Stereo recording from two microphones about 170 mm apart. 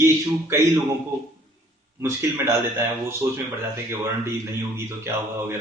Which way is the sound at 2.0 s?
15° right (ahead or behind).